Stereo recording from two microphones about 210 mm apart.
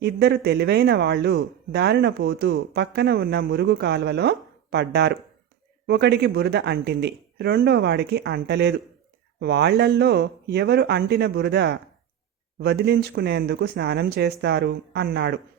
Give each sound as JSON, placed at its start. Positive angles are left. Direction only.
{"t": 0.0, "sound": "speech", "side_deg": -50}